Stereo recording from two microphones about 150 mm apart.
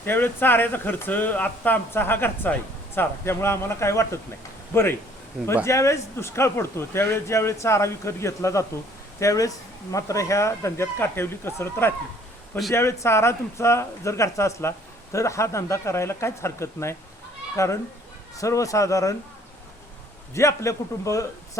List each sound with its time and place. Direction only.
0.0 s speech: 15° left (ahead or behind)
20.3 s speech: 20° left (ahead or behind)